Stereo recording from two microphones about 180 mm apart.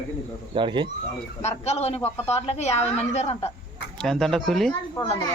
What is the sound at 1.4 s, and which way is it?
A woman's voice, 35° left (ahead or behind).